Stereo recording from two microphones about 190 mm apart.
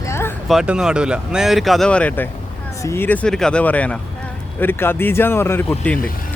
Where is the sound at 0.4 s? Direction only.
5° right (ahead or behind).